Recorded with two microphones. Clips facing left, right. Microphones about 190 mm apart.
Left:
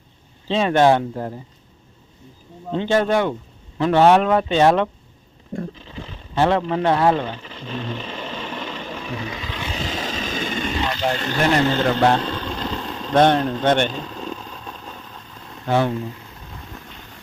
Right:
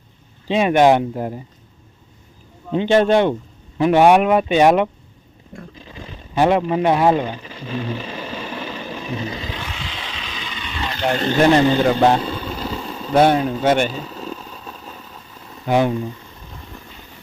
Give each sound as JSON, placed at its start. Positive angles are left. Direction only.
{"t": 0.4, "sound": "speech", "side_deg": -15}
{"t": 2.7, "sound": "speech", "side_deg": -20}
{"t": 3.8, "sound": "speech", "side_deg": -15}
{"t": 5.9, "sound": "a sound", "side_deg": -15}
{"t": 9.2, "sound": "vehicle", "side_deg": -30}
{"t": 9.6, "sound": "wild animals", "side_deg": 40}
{"t": 11.3, "sound": "vehicle", "side_deg": -20}
{"t": 15.7, "sound": "speech", "side_deg": -15}
{"t": 16.0, "sound": "a sound", "side_deg": 0}